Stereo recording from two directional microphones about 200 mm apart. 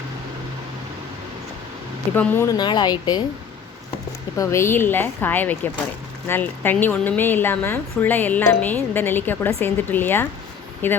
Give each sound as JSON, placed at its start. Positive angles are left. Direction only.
{"t": 2.1, "sound": "speech", "side_deg": 10}
{"t": 4.4, "sound": "a woman's voice", "side_deg": 15}